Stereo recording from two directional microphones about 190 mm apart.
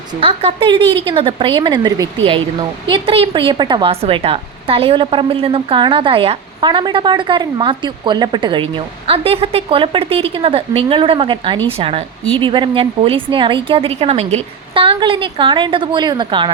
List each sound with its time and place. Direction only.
0.2 s a woman's voice: 30° right (ahead or behind)